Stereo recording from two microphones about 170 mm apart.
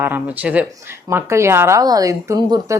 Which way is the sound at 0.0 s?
10° right (ahead or behind).